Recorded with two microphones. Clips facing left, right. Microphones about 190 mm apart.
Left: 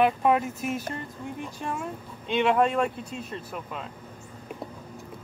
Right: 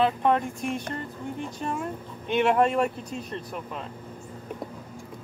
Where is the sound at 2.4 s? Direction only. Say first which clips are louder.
Right 1 dB; 5° right (ahead or behind).